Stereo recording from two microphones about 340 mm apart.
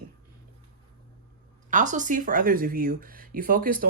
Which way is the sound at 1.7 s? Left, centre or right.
Right.